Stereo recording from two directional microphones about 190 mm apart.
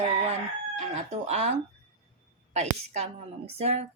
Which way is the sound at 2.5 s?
35° right (ahead or behind).